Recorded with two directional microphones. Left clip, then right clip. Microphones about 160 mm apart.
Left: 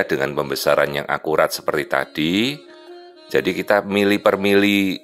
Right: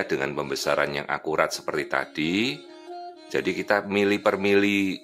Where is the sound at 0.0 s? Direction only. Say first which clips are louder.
Left 6 dB; 30° left (ahead or behind).